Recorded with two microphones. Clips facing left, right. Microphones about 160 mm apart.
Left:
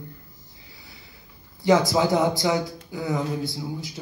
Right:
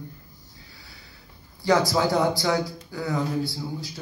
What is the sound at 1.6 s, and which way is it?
Speech, 20° left (ahead or behind).